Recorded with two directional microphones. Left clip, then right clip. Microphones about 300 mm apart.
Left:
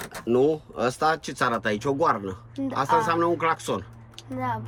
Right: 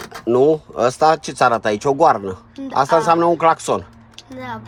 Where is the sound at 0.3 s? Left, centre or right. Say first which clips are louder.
Right 8 dB; centre.